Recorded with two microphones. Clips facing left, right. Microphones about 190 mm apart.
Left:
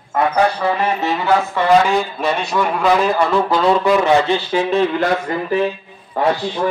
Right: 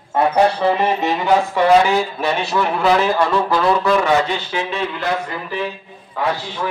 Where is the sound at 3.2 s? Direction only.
10° left (ahead or behind); by 6.3 s 50° left (ahead or behind).